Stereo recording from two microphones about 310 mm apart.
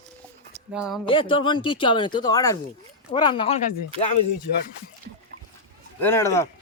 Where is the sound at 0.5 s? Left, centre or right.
Centre.